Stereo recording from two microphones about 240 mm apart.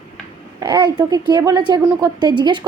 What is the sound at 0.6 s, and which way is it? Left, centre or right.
A child's voice, centre.